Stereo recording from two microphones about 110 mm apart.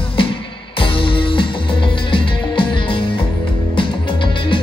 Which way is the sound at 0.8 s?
55° left (ahead or behind).